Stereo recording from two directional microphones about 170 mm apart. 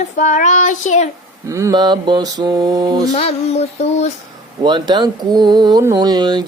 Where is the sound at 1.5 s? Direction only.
20° right (ahead or behind).